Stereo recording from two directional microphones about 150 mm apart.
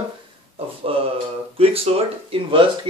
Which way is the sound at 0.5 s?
40° right (ahead or behind).